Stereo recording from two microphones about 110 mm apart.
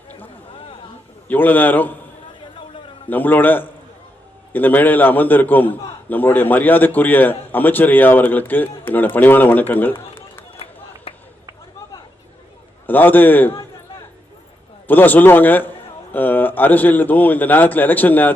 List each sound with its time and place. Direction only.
1.3 s a man's voice: 15° left (ahead or behind)
3.1 s a man's voice: 15° left (ahead or behind)
11.1 s a sound: 65° left (ahead or behind)
12.9 s a man's voice: 15° left (ahead or behind)
14.8 s a man's voice: 15° left (ahead or behind)